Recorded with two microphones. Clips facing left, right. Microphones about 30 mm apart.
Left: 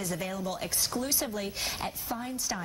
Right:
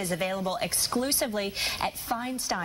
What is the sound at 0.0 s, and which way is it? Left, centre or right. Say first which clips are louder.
Speech: right 5 dB; right.